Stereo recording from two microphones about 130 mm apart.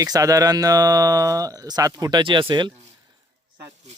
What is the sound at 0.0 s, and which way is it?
Speech, 25° right (ahead or behind).